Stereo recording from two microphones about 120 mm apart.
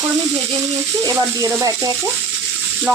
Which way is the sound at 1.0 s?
30° right (ahead or behind).